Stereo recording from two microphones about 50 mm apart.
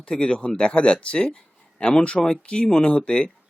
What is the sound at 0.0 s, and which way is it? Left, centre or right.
Speech, centre.